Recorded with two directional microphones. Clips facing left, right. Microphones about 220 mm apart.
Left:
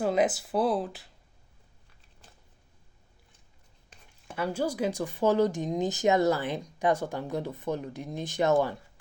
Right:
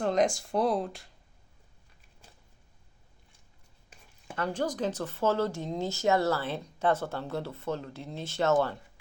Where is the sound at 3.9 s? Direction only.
5° right (ahead or behind).